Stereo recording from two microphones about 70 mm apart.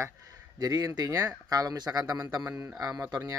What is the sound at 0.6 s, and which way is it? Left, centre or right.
Speech, right.